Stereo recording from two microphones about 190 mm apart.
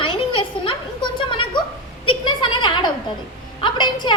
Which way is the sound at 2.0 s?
25° left (ahead or behind).